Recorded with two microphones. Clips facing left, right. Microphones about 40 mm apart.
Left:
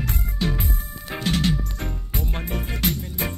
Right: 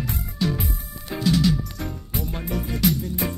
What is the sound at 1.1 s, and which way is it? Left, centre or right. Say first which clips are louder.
Music: right 3 dB; left.